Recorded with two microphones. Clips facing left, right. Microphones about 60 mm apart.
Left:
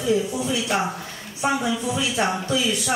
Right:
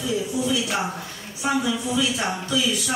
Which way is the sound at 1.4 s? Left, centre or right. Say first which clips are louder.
Left 1 dB; left.